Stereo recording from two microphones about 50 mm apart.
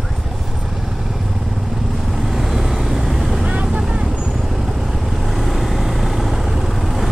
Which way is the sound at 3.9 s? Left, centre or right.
Centre.